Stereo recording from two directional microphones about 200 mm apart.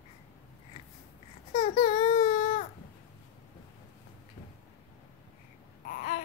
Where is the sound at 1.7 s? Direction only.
25° left (ahead or behind).